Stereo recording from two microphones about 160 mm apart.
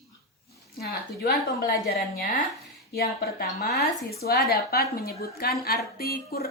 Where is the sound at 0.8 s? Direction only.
75° left (ahead or behind).